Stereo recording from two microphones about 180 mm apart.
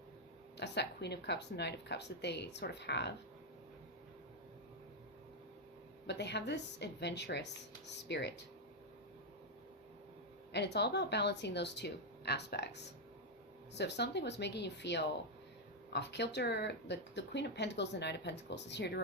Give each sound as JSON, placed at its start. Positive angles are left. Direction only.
{"t": 0.5, "sound": "speech", "side_deg": 70}
{"t": 6.1, "sound": "speech", "side_deg": 70}
{"t": 10.5, "sound": "speech", "side_deg": 70}